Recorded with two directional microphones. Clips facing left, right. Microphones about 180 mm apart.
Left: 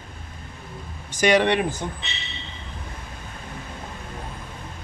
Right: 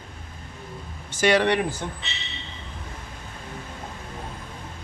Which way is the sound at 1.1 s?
15° left (ahead or behind).